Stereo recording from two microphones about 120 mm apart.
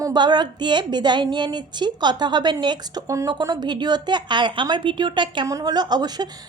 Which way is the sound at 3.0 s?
25° right (ahead or behind).